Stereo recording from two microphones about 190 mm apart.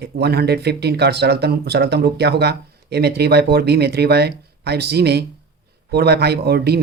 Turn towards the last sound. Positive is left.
turn(degrees=-55)  # may be behind; listen again after turning